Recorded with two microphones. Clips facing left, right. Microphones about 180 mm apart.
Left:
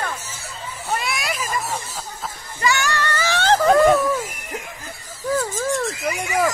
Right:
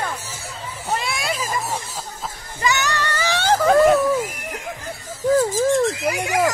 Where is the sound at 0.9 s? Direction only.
25° right (ahead or behind).